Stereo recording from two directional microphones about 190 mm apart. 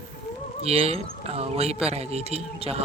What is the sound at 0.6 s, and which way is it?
Speech, 30° right (ahead or behind).